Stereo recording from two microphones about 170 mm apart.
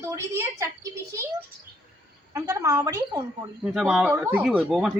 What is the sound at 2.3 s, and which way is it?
Speech, 15° right (ahead or behind).